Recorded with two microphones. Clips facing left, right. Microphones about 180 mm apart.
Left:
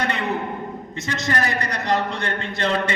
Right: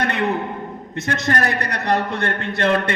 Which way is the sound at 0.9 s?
60° right (ahead or behind).